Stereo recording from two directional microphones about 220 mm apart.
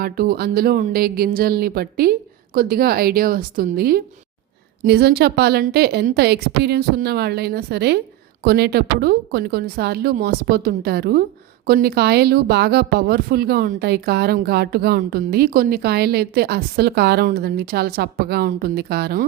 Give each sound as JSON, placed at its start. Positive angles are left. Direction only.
{"t": 0.0, "sound": "speech", "side_deg": -45}